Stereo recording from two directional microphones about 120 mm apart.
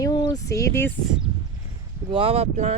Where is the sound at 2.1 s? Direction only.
55° right (ahead or behind).